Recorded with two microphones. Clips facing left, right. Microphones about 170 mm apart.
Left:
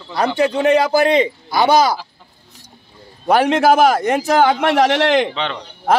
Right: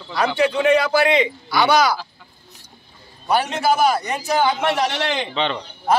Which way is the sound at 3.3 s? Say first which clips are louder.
Left 6 dB; 90° left.